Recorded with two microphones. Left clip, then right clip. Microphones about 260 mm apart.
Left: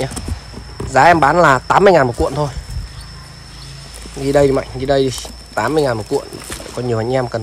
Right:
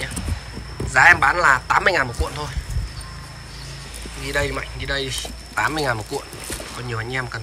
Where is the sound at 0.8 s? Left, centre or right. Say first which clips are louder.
Left 3 dB; centre.